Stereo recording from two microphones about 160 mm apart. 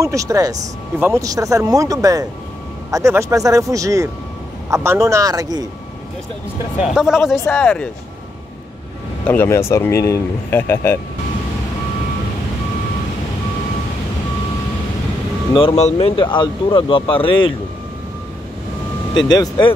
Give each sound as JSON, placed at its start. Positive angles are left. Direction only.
{"t": 0.0, "sound": "speech", "side_deg": -20}
{"t": 6.8, "sound": "speech", "side_deg": -5}
{"t": 7.4, "sound": "speech", "side_deg": 5}
{"t": 9.3, "sound": "speech", "side_deg": 15}
{"t": 15.5, "sound": "speech", "side_deg": 40}
{"t": 19.3, "sound": "speech", "side_deg": 25}